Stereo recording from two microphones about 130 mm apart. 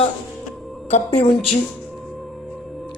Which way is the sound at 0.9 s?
55° left (ahead or behind).